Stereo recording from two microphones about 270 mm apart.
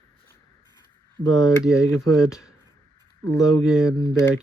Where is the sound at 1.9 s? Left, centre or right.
Right.